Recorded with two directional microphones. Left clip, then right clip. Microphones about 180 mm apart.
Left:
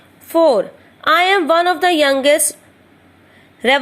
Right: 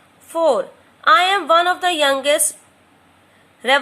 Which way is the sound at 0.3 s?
15° left (ahead or behind).